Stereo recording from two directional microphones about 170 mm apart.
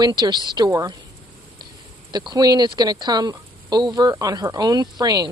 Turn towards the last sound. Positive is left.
turn(degrees=-25)  # may be behind; listen again after turning